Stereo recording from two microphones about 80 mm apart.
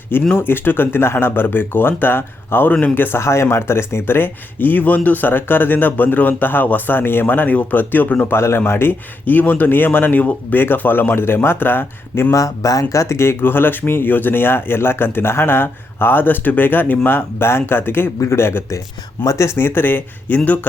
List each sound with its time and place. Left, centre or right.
0.3 s speech: left
12.3 s speech: left